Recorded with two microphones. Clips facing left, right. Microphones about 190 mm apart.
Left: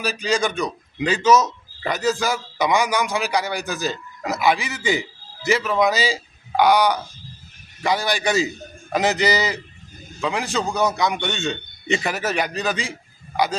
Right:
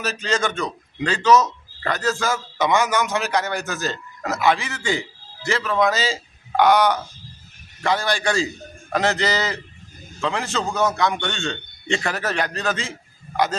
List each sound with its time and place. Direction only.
0.0 s a man's voice: 10° left (ahead or behind)